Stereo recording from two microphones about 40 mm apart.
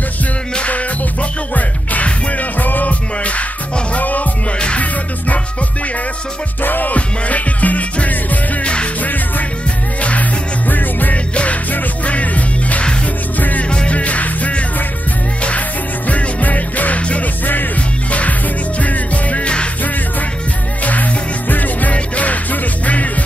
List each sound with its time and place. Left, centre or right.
1.5 s music: left
2.6 s music: left
4.5 s music: left
6.6 s music: left
10.7 s music: left
12.0 s music: left
13.7 s music: left
16.1 s music: left
20.8 s music: left